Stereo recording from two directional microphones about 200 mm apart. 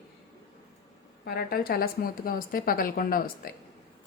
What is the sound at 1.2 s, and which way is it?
A woman's voice, 50° left (ahead or behind).